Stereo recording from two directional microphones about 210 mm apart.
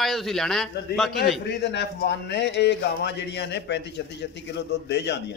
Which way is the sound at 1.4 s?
55° left (ahead or behind).